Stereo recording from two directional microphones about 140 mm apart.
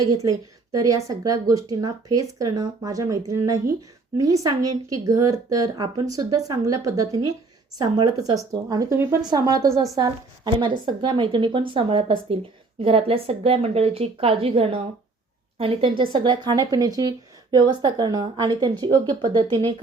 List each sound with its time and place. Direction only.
0.0 s a woman's voice: 25° right (ahead or behind)